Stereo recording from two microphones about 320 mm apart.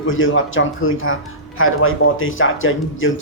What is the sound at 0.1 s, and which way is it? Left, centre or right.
A man's voice, left.